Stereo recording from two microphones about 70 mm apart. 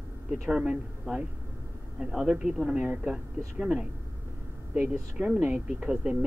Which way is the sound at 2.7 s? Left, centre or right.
Right.